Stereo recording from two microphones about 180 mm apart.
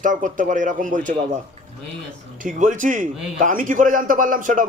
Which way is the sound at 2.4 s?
45° right (ahead or behind).